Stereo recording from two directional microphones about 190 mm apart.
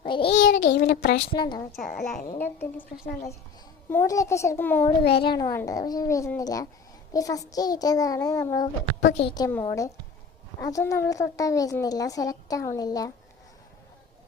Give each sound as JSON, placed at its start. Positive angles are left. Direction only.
{"t": 0.0, "sound": "a sound", "side_deg": 25}
{"t": 0.3, "sound": "a sound", "side_deg": 75}
{"t": 0.5, "sound": "speech", "side_deg": 45}
{"t": 1.3, "sound": "a child's voice", "side_deg": 25}
{"t": 2.4, "sound": "a child's voice", "side_deg": 10}
{"t": 3.8, "sound": "a child's voice", "side_deg": 15}
{"t": 9.0, "sound": "a woman's voice", "side_deg": 65}
{"t": 9.2, "sound": "a child's voice", "side_deg": 20}